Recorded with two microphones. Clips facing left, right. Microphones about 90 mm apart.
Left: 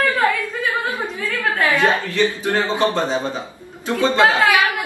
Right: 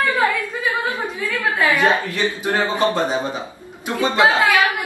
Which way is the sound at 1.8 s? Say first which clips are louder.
Left 1 dB; 15° right (ahead or behind).